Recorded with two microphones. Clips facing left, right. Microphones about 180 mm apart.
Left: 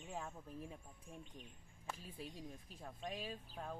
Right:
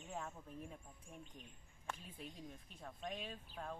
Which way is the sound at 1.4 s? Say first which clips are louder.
Left 2 dB; 35° left (ahead or behind).